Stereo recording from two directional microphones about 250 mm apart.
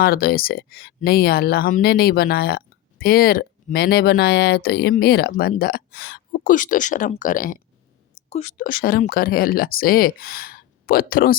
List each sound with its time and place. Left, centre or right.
0.0 s speech: left